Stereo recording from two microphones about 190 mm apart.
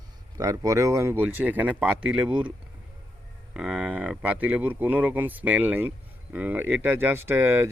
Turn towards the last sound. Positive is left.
turn(degrees=-10)  # may be behind; listen again after turning